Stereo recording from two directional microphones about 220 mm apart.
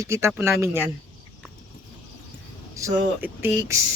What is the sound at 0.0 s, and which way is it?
Speech, 10° right (ahead or behind).